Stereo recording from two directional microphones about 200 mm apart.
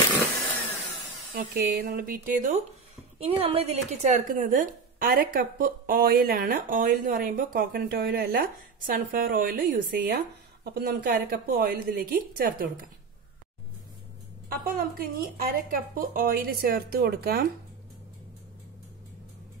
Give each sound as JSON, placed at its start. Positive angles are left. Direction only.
{"t": 1.3, "sound": "speech", "side_deg": -50}
{"t": 3.2, "sound": "speech", "side_deg": -30}
{"t": 14.6, "sound": "speech", "side_deg": -45}